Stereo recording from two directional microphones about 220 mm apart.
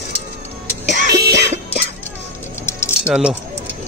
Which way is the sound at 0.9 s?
35° right (ahead or behind).